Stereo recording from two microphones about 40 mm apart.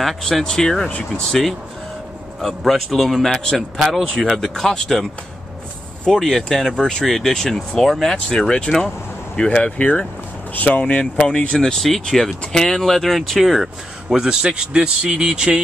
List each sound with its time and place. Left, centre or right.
0.0 s a man's voice: centre
0.8 s speech: left
2.4 s a man's voice: centre
6.0 s speech: centre
6.7 s speech: centre
7.1 s speech: centre
9.4 s speech: left
10.5 s speech: left
10.8 s speech: left; by 14.1 s centre
14.1 s speech: right